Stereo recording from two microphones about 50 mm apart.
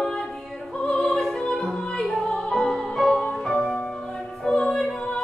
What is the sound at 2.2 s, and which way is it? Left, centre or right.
Music, centre.